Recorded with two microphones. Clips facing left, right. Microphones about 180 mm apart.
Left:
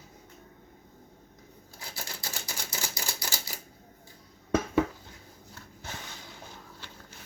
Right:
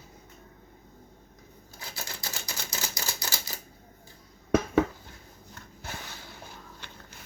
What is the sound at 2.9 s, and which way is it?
Typewriter, 20° right (ahead or behind).